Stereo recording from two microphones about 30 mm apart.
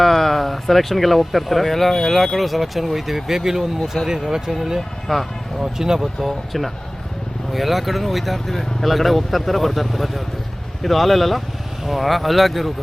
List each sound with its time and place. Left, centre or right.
0.0 s speech: centre
3.9 s speech: centre
4.3 s speech: centre
5.1 s speech: centre
5.5 s speech: centre
6.1 s speech: centre